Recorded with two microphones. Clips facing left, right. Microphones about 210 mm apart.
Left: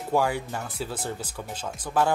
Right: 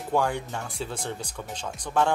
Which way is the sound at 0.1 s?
5° left (ahead or behind).